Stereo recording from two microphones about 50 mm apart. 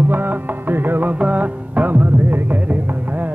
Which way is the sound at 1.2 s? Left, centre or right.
Right.